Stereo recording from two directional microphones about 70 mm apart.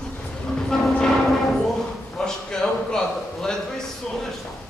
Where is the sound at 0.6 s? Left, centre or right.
Centre.